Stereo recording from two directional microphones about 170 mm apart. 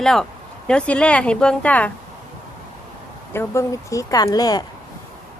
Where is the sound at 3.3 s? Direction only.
15° left (ahead or behind).